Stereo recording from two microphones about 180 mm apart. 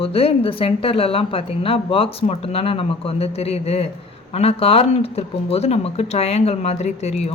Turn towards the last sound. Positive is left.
turn(degrees=40)  # may be behind; listen again after turning